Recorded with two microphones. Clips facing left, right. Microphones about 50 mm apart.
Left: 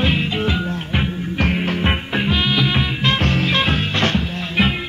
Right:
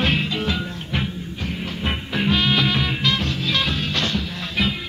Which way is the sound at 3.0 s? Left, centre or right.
Left.